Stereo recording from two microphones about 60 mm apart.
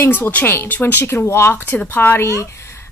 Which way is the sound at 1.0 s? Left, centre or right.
Left.